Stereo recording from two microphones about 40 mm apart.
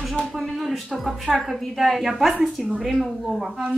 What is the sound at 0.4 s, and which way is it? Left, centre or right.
Speech, centre.